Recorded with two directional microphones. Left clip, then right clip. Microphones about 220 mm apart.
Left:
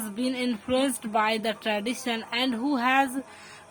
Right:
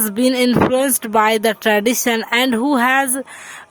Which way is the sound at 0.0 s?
50° right (ahead or behind).